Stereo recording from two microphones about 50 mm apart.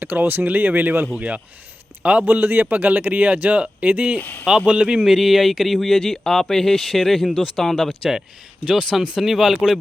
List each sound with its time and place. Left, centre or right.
0.0 s speech: right
2.2 s speech: right
4.2 s speech: left
4.4 s a man's voice: centre
7.3 s speech: centre
7.5 s a man's voice: centre